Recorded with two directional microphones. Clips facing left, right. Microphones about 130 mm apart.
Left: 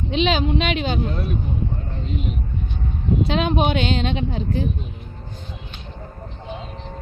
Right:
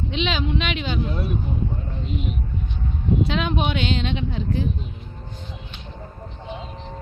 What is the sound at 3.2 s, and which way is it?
A woman's voice, 40° left (ahead or behind).